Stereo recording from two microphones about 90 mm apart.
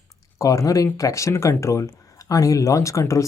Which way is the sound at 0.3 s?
35° left (ahead or behind).